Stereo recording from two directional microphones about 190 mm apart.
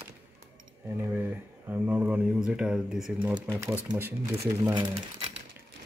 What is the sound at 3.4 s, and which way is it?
Speech, 15° right (ahead or behind).